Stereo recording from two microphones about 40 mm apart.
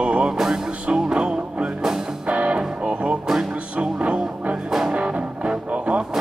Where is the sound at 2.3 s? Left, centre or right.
Right.